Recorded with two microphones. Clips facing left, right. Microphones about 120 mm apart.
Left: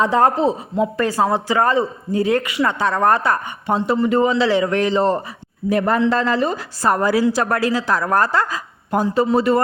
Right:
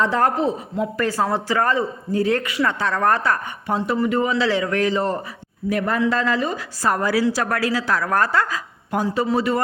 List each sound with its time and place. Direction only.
0.0 s a man's voice: 20° left (ahead or behind)
8.1 s speech: 35° left (ahead or behind)